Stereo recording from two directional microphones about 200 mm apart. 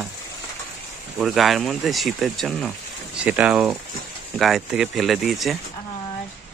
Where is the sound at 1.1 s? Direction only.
Centre (ahead or behind).